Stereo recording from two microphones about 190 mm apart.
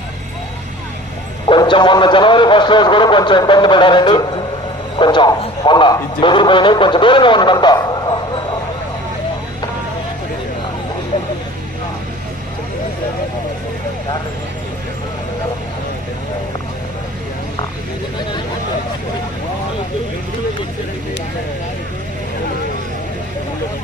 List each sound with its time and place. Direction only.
1.5 s a man's voice: 25° left (ahead or behind)